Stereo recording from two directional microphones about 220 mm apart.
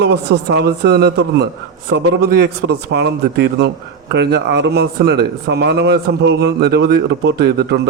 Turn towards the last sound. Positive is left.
turn(degrees=-50)  # may be behind; listen again after turning